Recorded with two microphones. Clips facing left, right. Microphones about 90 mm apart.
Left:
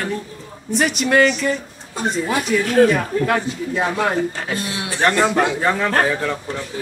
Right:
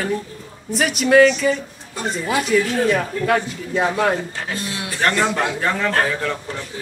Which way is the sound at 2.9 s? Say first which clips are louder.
Even; centre (ahead or behind).